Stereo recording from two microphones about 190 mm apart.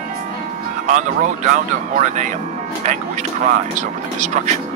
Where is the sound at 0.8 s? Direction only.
40° right (ahead or behind).